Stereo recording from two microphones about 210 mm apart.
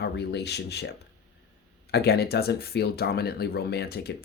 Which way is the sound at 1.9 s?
50° left (ahead or behind).